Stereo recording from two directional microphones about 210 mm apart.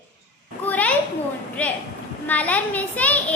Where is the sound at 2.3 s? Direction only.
5° left (ahead or behind).